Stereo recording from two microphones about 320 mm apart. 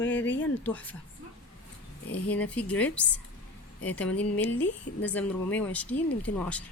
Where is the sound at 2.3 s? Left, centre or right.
Centre.